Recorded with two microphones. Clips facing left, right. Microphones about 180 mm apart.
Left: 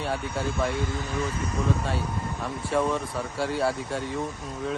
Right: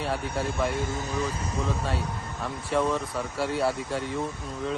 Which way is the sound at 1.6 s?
Centre (ahead or behind).